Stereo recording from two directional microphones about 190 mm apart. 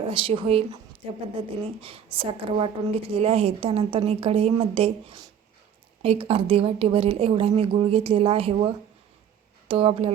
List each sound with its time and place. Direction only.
0.1 s a woman's voice: 25° right (ahead or behind)